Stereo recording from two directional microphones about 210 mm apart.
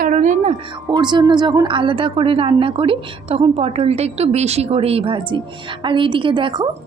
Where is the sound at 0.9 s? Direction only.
20° right (ahead or behind).